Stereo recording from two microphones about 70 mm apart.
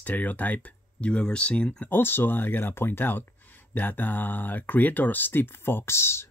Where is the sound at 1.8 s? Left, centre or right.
Left.